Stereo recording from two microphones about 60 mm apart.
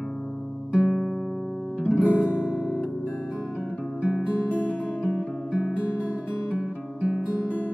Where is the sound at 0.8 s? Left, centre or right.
Centre.